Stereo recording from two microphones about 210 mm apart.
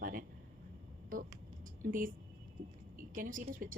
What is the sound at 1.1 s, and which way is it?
Speech, 45° right (ahead or behind).